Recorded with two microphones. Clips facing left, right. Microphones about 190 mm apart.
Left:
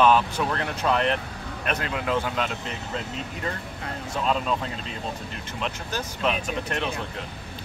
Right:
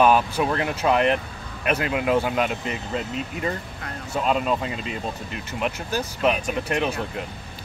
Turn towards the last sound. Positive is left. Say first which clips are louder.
# right 4 dB
turn(degrees=-10)  # may be behind; listen again after turning